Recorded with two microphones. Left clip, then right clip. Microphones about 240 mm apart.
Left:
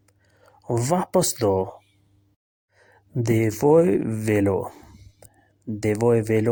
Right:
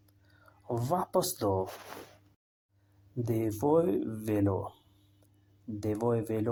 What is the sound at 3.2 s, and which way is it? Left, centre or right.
Speech, left.